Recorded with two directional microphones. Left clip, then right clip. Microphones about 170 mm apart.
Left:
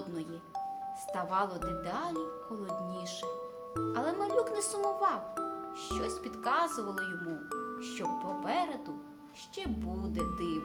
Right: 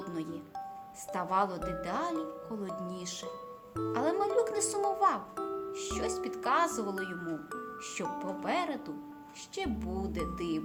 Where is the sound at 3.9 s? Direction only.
35° right (ahead or behind).